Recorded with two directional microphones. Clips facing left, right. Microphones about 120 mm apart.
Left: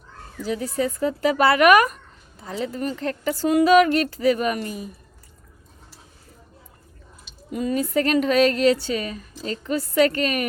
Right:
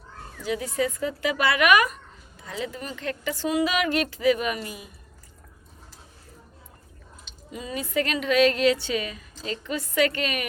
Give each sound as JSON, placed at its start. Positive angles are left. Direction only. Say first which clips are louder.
{"t": 0.4, "sound": "speech", "louder": "left 2 dB", "side_deg": 35}
{"t": 7.5, "sound": "speech", "louder": "left 6 dB", "side_deg": 45}